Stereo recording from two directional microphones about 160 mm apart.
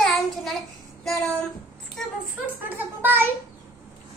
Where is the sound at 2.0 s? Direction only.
Centre (ahead or behind).